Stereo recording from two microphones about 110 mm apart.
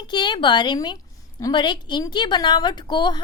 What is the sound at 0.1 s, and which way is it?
A woman's voice, 45° left (ahead or behind).